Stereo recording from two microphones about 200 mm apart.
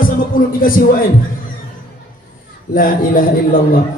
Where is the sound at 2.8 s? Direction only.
45° left (ahead or behind).